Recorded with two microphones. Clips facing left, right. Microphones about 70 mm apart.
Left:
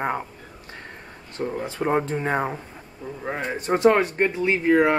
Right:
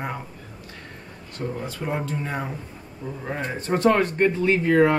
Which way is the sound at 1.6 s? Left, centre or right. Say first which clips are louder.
Left 8 dB; left.